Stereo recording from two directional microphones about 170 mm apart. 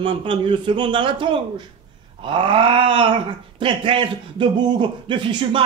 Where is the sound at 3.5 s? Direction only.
30° right (ahead or behind).